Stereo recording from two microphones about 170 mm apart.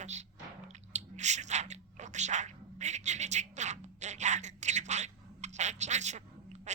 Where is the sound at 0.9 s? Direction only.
45° right (ahead or behind).